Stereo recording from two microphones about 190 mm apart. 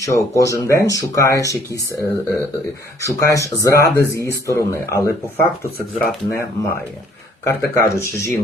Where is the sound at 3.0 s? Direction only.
15° left (ahead or behind).